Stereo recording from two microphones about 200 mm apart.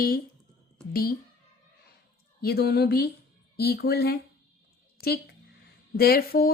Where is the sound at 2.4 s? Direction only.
50° left (ahead or behind).